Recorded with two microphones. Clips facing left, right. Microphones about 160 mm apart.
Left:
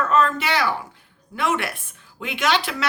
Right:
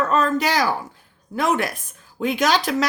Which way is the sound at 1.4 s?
40° right (ahead or behind).